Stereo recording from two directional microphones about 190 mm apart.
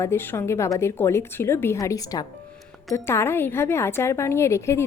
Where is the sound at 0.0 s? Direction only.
10° left (ahead or behind).